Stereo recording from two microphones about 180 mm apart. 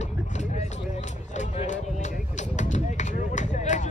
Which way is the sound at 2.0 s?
40° left (ahead or behind).